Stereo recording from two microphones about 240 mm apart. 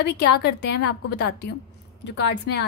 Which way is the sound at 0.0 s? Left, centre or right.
Left.